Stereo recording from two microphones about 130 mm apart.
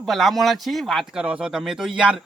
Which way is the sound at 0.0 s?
Centre (ahead or behind).